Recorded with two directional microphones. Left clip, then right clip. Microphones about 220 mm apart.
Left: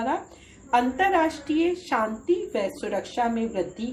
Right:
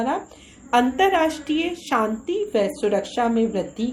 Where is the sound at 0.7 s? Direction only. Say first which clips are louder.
Right 3 dB; 35° right (ahead or behind).